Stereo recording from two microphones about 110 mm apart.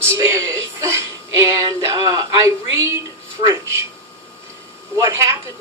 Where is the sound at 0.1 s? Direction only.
25° right (ahead or behind).